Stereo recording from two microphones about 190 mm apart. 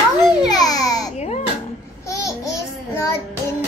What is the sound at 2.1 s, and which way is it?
Babbling, 15° left (ahead or behind).